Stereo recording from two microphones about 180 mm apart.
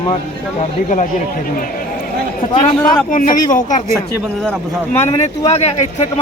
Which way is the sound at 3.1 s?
45° left (ahead or behind).